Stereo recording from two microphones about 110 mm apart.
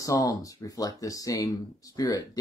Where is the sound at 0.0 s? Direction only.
30° left (ahead or behind).